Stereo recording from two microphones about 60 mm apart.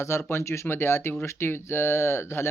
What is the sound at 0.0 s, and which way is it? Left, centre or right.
Speech, left.